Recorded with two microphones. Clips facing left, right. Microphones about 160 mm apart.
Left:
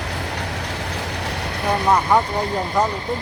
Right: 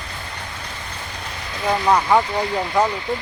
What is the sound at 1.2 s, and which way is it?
Vehicle, 75° left (ahead or behind).